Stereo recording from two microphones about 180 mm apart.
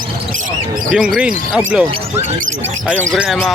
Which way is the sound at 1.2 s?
5° right (ahead or behind).